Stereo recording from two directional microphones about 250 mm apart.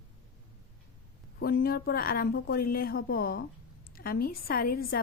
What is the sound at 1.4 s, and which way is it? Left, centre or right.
A woman's voice, left.